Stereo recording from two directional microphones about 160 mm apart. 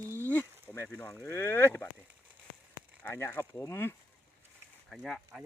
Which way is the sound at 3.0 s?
15° left (ahead or behind).